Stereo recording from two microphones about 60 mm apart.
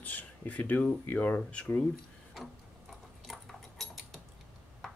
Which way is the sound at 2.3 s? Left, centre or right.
Centre.